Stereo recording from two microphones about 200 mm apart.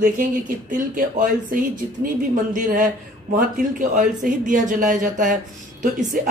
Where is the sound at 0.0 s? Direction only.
40° right (ahead or behind).